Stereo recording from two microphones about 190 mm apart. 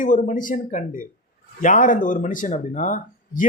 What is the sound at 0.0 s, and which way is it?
Speech, 40° left (ahead or behind).